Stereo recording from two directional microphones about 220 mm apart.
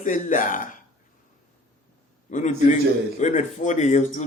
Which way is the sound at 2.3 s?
35° left (ahead or behind).